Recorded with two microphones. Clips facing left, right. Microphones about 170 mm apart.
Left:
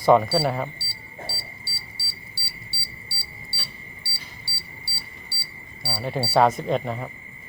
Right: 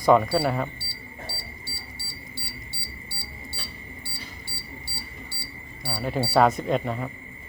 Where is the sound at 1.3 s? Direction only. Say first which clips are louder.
Even; 15° right (ahead or behind).